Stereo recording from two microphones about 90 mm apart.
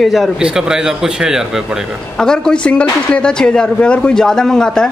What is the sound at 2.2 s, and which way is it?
A man's voice, 10° left (ahead or behind).